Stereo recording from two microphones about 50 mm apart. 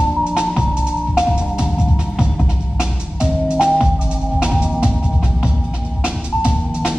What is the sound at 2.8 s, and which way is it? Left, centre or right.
Music, centre.